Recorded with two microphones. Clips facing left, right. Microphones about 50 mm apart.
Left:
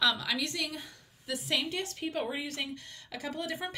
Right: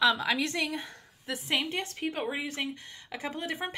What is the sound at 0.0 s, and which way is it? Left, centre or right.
A woman's voice, right.